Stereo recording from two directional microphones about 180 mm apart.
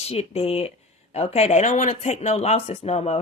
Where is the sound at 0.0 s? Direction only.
35° left (ahead or behind).